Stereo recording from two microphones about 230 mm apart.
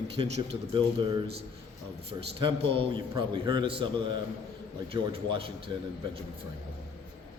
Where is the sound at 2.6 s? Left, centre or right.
Right.